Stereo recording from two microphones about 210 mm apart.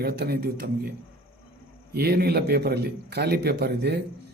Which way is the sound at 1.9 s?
50° right (ahead or behind).